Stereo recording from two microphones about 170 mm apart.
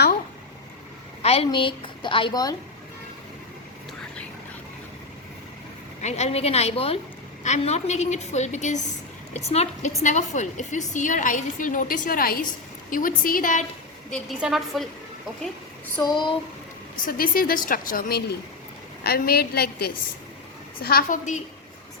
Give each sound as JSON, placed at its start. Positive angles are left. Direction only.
{"t": 1.2, "sound": "a woman's voice", "side_deg": 35}
{"t": 6.0, "sound": "a woman's voice", "side_deg": 40}
{"t": 14.1, "sound": "a woman's voice", "side_deg": 0}
{"t": 16.0, "sound": "speech", "side_deg": 25}
{"t": 17.1, "sound": "a woman's voice", "side_deg": 60}